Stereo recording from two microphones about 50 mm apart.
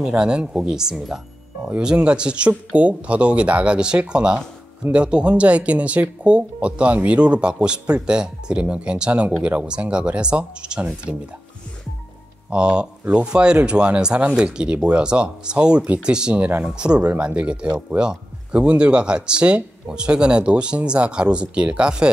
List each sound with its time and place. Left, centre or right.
0.0 s speech: centre
12.4 s speech: centre